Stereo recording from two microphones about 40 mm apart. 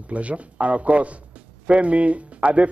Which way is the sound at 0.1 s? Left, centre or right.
Right.